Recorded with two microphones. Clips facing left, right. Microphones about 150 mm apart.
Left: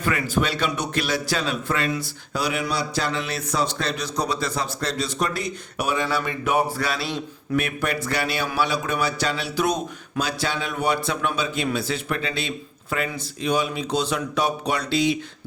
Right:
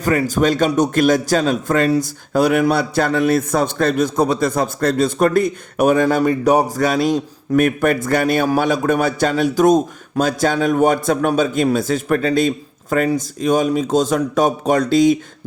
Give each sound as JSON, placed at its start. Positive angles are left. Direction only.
{"t": 0.0, "sound": "a man's voice", "side_deg": -40}